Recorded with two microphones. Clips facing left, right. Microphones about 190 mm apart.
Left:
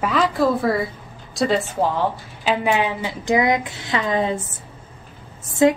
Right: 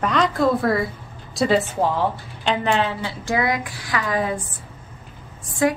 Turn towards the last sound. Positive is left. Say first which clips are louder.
# left 4 dB
turn(degrees=20)  # may be behind; listen again after turning